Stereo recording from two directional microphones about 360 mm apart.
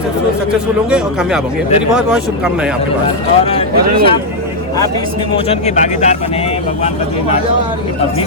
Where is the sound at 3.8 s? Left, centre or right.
Right.